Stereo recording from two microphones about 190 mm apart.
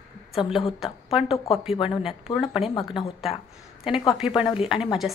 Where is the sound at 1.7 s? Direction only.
25° left (ahead or behind).